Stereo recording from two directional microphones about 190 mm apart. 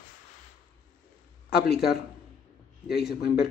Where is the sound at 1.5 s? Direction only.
55° left (ahead or behind).